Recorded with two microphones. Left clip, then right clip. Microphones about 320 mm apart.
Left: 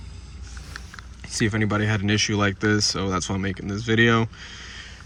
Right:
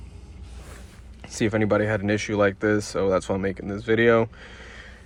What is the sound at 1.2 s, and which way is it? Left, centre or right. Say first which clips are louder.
Speech: right 1 dB; centre.